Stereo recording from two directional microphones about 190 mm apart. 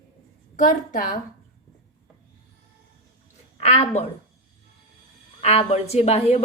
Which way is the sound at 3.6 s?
35° left (ahead or behind).